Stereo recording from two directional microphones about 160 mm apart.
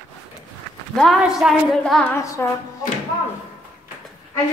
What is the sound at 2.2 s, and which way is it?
Speech, 20° left (ahead or behind).